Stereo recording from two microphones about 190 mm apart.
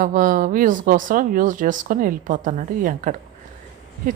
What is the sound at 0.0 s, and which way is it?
A woman's voice, 45° right (ahead or behind).